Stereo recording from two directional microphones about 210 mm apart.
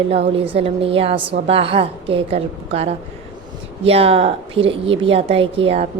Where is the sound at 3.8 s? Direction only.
30° right (ahead or behind).